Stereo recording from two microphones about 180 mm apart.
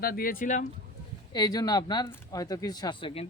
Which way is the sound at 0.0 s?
55° left (ahead or behind).